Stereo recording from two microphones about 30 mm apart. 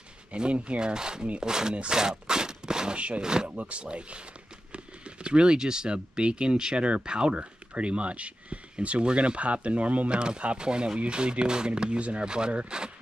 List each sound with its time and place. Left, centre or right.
0.3 s speech: right
0.7 s speech: right
1.9 s a sound: right
3.2 s speech: right
3.4 s speech: right
10.0 s speech: right